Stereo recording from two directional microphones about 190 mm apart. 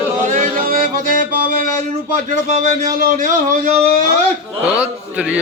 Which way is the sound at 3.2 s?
45° right (ahead or behind).